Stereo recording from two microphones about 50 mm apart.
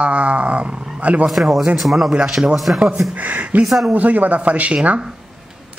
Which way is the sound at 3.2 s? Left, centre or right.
Right.